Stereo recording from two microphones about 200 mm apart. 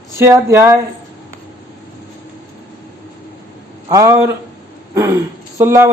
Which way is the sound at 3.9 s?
15° right (ahead or behind).